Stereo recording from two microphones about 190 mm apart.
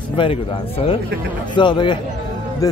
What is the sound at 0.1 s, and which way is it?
Speech, 30° left (ahead or behind).